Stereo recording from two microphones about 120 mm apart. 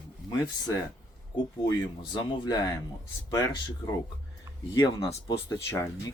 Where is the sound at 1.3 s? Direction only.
40° left (ahead or behind).